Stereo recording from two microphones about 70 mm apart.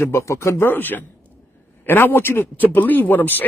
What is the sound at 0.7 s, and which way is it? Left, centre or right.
Speech, left.